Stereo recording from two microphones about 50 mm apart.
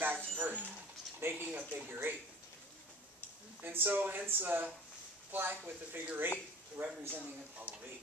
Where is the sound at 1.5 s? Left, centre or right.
Right.